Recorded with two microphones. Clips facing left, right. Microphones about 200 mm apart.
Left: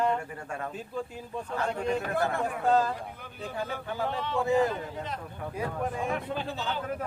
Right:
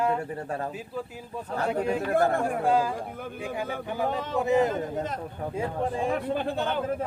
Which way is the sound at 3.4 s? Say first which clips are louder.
Right 2 dB; 15° right (ahead or behind).